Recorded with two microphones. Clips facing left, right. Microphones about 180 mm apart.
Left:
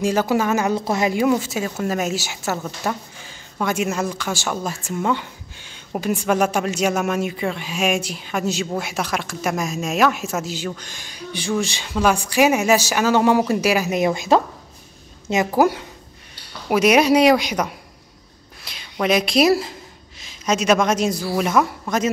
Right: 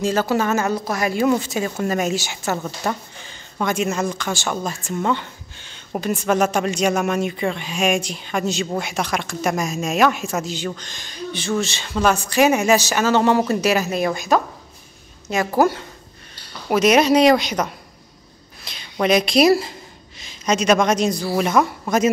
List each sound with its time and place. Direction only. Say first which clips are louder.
0.0 s speech: even; 15° left (ahead or behind)
0.7 s a woman's voice: left 2 dB; 25° left (ahead or behind)
1.2 s speech: even; 5° left (ahead or behind); by 14.4 s 25° left (ahead or behind)
15.5 s speech: right 2 dB; 10° left (ahead or behind)
18.6 s a sound: right 2 dB; 5° left (ahead or behind)
21.4 s speech: right 1 dB; centre (ahead or behind)